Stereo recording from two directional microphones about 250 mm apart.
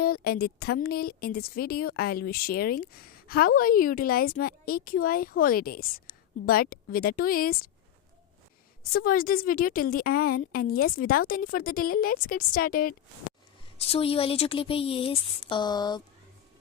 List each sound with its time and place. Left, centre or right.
0.0 s a woman's voice: left
8.8 s a woman's voice: left
13.7 s a woman's voice: left